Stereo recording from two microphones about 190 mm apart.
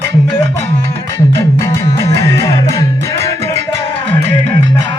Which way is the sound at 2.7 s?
15° left (ahead or behind).